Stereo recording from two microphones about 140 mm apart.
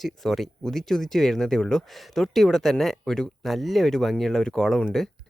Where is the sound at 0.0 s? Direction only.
Centre (ahead or behind).